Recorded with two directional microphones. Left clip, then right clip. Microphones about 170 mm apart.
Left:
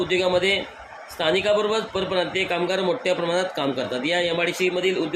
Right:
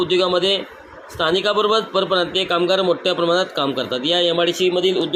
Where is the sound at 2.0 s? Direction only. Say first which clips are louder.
Right 5 dB; 15° left (ahead or behind).